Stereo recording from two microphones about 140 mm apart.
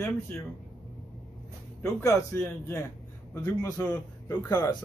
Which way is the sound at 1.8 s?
15° left (ahead or behind).